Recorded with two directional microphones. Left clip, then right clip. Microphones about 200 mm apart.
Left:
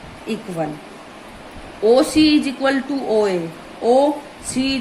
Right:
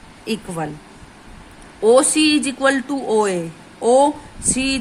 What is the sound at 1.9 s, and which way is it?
Speech, 25° right (ahead or behind).